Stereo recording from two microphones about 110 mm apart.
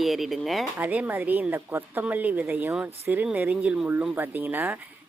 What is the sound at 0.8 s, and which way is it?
A woman's voice, 15° right (ahead or behind).